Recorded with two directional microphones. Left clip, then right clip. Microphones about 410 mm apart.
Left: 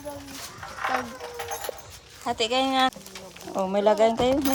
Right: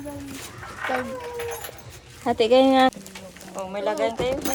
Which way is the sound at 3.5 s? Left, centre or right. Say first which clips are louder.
Left 5 dB; left.